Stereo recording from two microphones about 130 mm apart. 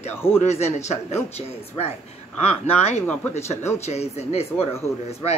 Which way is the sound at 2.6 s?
55° left (ahead or behind).